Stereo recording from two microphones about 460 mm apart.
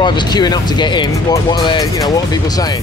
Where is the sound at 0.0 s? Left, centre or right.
Centre.